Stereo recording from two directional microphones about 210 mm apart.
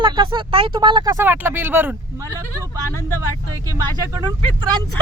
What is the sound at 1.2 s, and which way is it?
Speech, 10° right (ahead or behind).